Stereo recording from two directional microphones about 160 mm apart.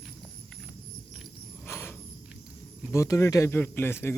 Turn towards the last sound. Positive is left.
turn(degrees=15)  # may be behind; listen again after turning